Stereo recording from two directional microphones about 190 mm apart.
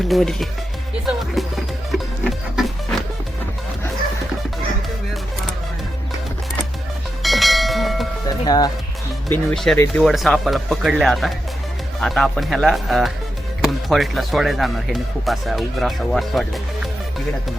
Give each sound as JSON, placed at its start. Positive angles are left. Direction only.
{"t": 0.1, "sound": "speech", "side_deg": 0}
{"t": 1.0, "sound": "music", "side_deg": 0}
{"t": 7.2, "sound": "bell", "side_deg": 0}
{"t": 8.3, "sound": "speech", "side_deg": 20}
{"t": 9.3, "sound": "speech", "side_deg": 5}
{"t": 10.0, "sound": "speech", "side_deg": 0}